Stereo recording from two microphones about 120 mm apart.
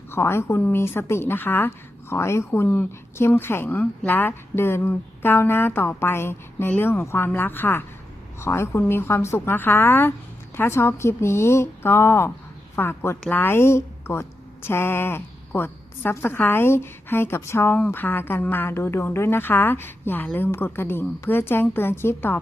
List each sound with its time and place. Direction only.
0.1 s a woman's voice: 20° left (ahead or behind)